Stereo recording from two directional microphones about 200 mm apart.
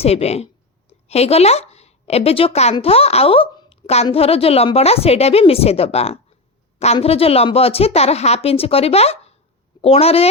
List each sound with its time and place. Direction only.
0.0 s a woman's voice: 30° left (ahead or behind)